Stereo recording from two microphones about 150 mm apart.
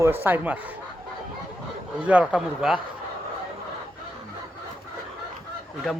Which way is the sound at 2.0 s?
10° right (ahead or behind).